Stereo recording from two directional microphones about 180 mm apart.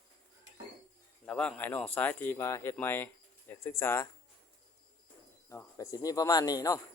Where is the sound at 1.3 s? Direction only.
5° left (ahead or behind).